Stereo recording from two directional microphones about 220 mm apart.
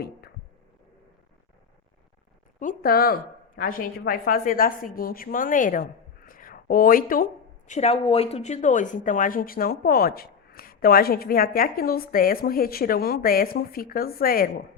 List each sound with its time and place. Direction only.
2.6 s a woman's voice: 40° left (ahead or behind)
7.7 s a woman's voice: 30° left (ahead or behind)